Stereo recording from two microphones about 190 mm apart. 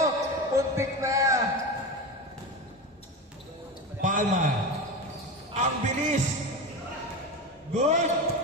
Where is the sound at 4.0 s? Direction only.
45° right (ahead or behind).